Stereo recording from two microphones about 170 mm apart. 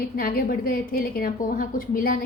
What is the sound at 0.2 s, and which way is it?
A woman's voice, 60° left (ahead or behind).